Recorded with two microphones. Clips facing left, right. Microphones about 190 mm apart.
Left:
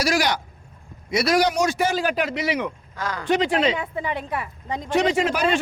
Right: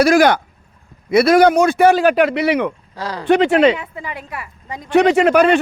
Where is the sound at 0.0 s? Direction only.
55° right (ahead or behind).